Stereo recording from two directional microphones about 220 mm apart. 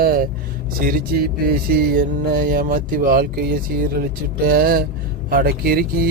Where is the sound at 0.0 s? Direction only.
40° right (ahead or behind).